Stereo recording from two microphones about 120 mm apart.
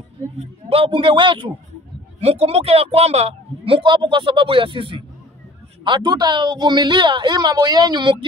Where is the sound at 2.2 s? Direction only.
60° right (ahead or behind); by 8.2 s 35° right (ahead or behind).